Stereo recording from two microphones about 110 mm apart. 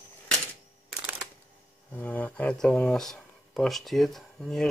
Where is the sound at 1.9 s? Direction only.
15° left (ahead or behind).